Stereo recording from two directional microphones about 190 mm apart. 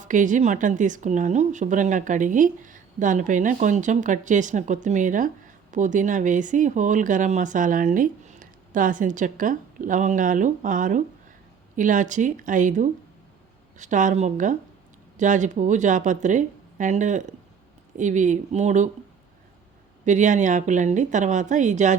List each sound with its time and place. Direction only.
0.1 s a woman's voice: 40° right (ahead or behind)
20.1 s a woman's voice: 40° right (ahead or behind)